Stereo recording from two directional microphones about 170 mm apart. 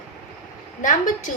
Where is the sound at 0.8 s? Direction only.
50° left (ahead or behind).